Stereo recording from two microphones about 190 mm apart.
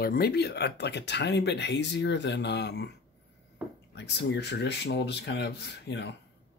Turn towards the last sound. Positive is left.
turn(degrees=65)  # may be behind; listen again after turning